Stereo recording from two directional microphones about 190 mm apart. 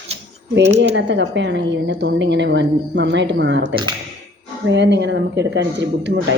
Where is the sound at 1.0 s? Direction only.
70° right (ahead or behind).